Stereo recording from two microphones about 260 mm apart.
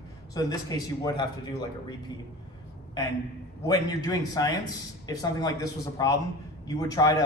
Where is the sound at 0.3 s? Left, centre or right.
Centre.